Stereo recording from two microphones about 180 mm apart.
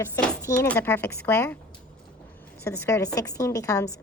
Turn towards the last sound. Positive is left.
turn(degrees=15)  # may be behind; listen again after turning